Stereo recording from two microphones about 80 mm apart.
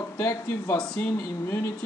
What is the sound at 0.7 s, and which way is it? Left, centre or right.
Speech, centre.